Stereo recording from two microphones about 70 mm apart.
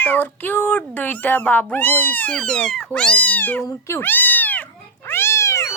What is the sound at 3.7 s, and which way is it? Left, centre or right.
Speech, left.